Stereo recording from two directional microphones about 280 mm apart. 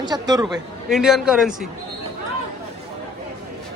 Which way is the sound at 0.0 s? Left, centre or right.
Centre.